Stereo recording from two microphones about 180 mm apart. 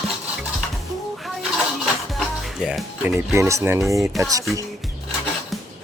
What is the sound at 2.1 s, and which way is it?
Speech, centre (ahead or behind).